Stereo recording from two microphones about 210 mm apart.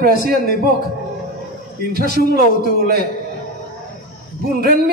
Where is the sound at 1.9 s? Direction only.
45° right (ahead or behind).